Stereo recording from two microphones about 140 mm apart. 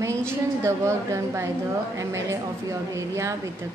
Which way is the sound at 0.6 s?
20° right (ahead or behind).